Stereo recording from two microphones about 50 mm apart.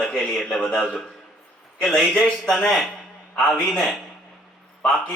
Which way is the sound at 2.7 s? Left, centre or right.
Centre.